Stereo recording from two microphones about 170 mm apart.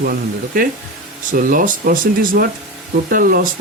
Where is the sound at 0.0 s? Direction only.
60° right (ahead or behind).